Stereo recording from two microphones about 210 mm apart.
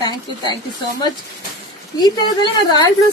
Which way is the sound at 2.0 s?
20° left (ahead or behind).